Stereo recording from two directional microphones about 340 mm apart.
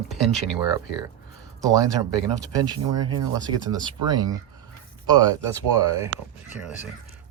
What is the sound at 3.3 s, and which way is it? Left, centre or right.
Speech, centre.